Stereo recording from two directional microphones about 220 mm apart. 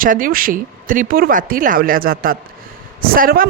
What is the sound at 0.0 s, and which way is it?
A woman's voice, 40° right (ahead or behind).